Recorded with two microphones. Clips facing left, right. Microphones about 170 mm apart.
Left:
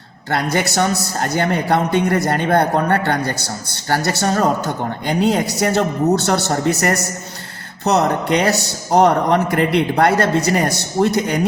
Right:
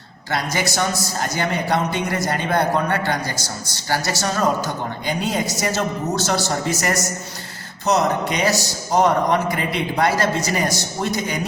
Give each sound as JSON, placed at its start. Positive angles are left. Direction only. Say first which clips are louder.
{"t": 0.3, "sound": "a man's voice", "louder": "left 4 dB", "side_deg": 60}